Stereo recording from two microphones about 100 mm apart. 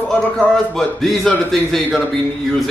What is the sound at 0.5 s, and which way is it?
Speech, 5° left (ahead or behind).